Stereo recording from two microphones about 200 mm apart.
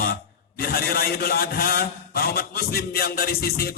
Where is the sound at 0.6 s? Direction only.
50° left (ahead or behind).